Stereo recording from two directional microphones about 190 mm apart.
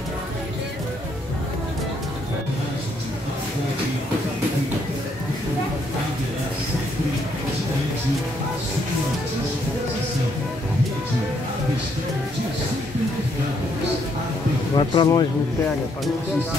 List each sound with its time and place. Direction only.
14.8 s speech: 25° left (ahead or behind)